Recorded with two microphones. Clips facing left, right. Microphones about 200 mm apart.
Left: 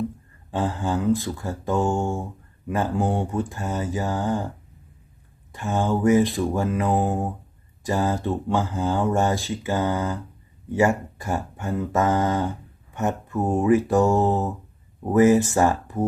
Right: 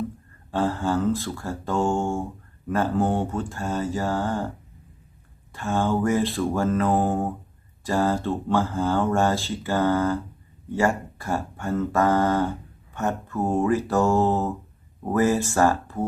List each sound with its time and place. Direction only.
0.5 s speech: 15° left (ahead or behind)
5.5 s speech: 15° left (ahead or behind)